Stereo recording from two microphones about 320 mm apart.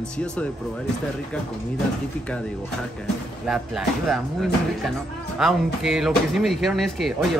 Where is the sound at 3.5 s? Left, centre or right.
Centre.